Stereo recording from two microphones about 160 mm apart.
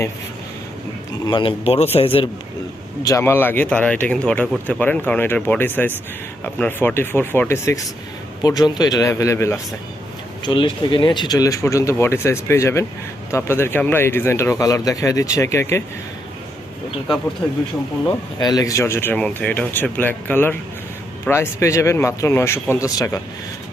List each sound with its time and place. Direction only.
1.2 s a man's voice: 30° left (ahead or behind)
3.0 s speech: 20° left (ahead or behind)
10.4 s speech: 30° left (ahead or behind)
18.3 s speech: 25° left (ahead or behind)